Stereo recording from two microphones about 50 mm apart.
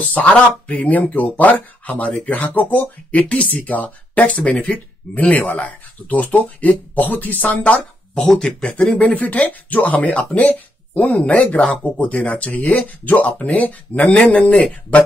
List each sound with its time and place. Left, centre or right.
0.1 s speech: left
8.2 s speech: centre
8.6 s speech: left